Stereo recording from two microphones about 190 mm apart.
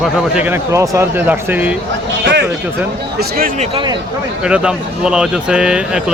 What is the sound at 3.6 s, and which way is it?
Speech, 30° right (ahead or behind).